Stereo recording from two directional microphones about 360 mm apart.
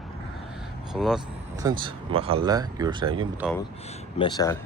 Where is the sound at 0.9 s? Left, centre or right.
Centre.